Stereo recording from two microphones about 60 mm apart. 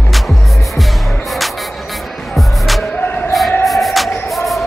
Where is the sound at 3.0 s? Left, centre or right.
Left.